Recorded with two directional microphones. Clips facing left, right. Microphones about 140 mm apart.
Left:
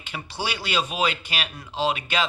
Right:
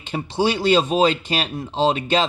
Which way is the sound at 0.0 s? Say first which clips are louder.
Right 10 dB; 25° right (ahead or behind).